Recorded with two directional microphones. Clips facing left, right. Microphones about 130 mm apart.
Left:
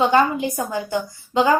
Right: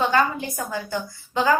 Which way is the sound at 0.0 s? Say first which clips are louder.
Left 4 dB; 20° left (ahead or behind).